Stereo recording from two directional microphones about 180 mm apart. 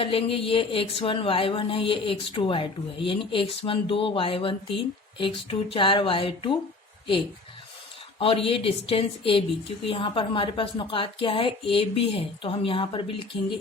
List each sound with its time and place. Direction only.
0.0 s speech: 30° left (ahead or behind)
8.2 s speech: 30° left (ahead or behind)